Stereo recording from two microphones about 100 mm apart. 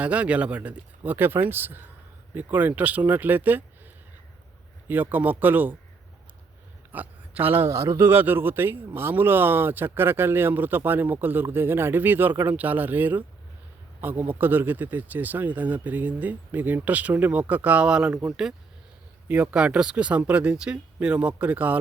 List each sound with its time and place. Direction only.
0.0 s speech: 15° right (ahead or behind)
4.9 s speech: 20° right (ahead or behind)
6.9 s speech: 15° right (ahead or behind)
7.7 s speech: 35° right (ahead or behind); by 18.1 s 10° right (ahead or behind)
19.3 s speech: 15° right (ahead or behind)